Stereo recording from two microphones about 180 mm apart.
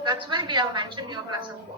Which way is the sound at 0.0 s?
25° right (ahead or behind).